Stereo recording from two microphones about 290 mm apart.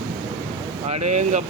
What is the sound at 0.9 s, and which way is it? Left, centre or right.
Speech, right.